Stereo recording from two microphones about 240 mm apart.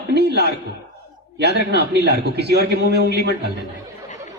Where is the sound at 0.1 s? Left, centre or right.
Right.